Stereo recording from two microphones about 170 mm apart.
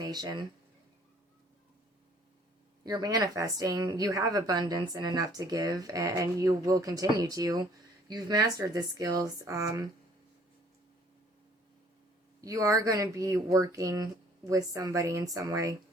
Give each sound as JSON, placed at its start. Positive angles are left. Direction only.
{"t": 0.0, "sound": "speech", "side_deg": -25}
{"t": 2.8, "sound": "a woman's voice", "side_deg": -25}
{"t": 12.4, "sound": "a woman's voice", "side_deg": -20}